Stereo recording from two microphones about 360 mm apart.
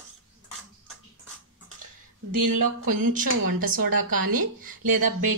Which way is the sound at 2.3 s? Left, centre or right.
Right.